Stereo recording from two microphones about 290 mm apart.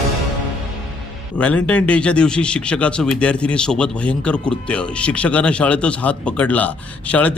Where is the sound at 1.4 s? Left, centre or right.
Centre.